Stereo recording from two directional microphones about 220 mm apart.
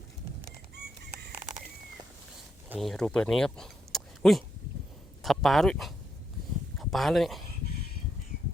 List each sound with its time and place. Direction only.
2.6 s speech: centre (ahead or behind)